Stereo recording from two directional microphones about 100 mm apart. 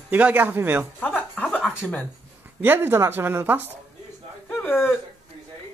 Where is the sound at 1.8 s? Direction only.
10° left (ahead or behind).